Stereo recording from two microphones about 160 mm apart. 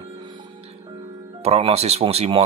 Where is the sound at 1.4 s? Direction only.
40° right (ahead or behind).